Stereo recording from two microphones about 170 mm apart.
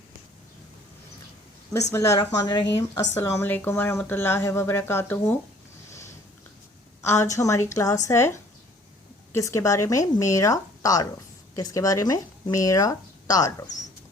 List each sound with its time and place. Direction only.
1.9 s speech: 20° left (ahead or behind)
7.0 s speech: 15° left (ahead or behind)